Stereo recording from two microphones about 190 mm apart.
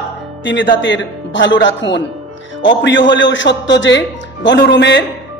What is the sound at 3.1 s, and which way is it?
A man's voice, 70° left (ahead or behind).